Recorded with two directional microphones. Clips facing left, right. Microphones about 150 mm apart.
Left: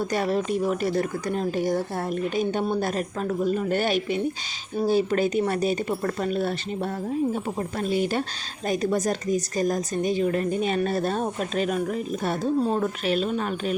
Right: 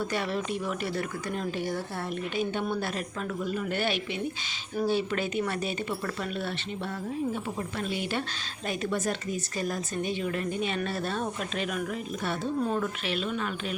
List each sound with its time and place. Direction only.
0.0 s speech: 40° left (ahead or behind)
7.8 s speech: 40° left (ahead or behind)